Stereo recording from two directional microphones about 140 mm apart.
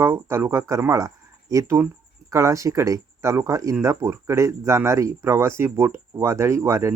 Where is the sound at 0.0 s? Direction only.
20° right (ahead or behind).